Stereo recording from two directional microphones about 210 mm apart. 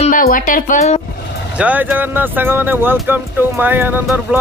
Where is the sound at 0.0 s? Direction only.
40° left (ahead or behind).